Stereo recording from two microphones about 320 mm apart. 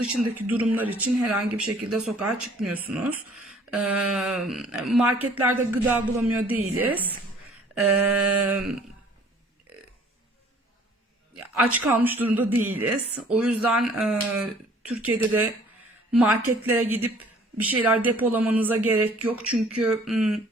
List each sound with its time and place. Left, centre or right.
0.0 s speech: centre
11.5 s speech: centre